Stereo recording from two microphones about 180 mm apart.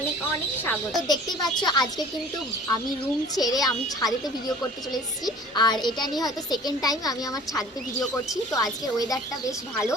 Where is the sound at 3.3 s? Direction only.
20° left (ahead or behind).